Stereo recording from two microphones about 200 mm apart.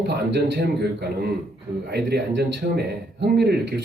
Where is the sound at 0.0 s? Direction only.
55° right (ahead or behind).